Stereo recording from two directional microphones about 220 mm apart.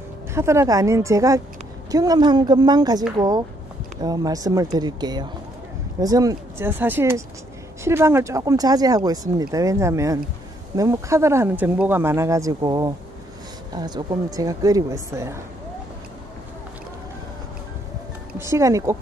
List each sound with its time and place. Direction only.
0.3 s a woman's voice: 10° right (ahead or behind)
18.4 s speech: 15° right (ahead or behind)